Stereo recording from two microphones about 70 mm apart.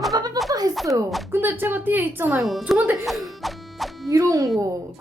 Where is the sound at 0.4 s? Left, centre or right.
Right.